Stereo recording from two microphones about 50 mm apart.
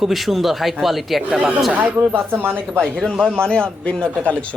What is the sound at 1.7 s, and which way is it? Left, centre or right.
Speech, right.